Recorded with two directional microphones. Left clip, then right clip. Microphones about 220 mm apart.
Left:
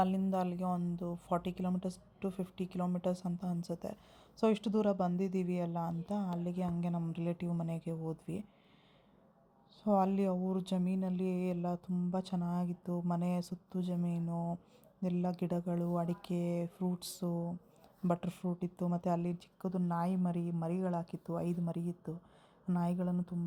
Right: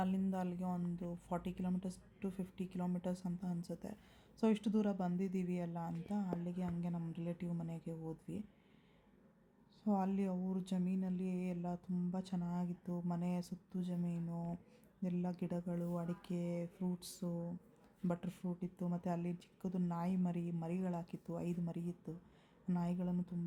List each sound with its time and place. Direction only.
0.0 s speech: 15° left (ahead or behind)
9.8 s speech: 20° left (ahead or behind)